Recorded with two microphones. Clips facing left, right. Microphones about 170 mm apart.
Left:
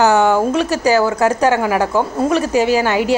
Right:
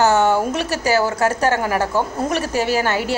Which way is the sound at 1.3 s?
15° left (ahead or behind).